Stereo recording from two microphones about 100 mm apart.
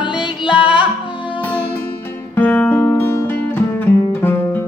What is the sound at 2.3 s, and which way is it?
Music, 15° left (ahead or behind).